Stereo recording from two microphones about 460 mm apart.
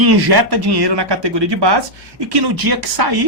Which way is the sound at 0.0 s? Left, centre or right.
Right.